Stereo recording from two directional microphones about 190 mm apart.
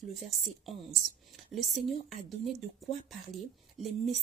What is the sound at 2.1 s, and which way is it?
Speech, centre (ahead or behind).